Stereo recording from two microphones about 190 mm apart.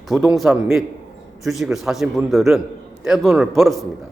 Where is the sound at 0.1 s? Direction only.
5° right (ahead or behind).